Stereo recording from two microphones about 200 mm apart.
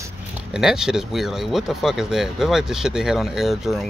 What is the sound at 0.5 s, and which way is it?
Speech, centre (ahead or behind).